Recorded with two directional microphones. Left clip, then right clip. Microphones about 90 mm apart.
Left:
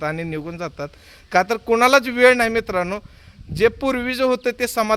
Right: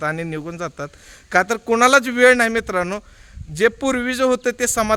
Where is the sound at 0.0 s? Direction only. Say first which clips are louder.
Right 1 dB; 50° right (ahead or behind).